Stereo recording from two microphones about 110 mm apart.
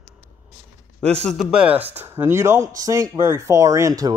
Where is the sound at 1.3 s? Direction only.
10° right (ahead or behind); by 4.1 s 30° right (ahead or behind).